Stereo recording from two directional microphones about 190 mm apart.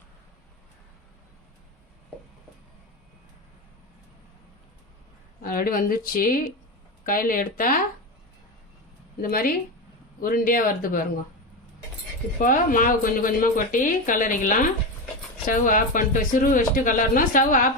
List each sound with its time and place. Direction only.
5.4 s speech: 50° left (ahead or behind)
9.2 s speech: 50° left (ahead or behind)
12.4 s speech: 45° left (ahead or behind)